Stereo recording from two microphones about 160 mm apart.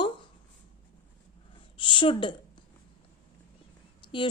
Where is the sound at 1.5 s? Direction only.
30° left (ahead or behind).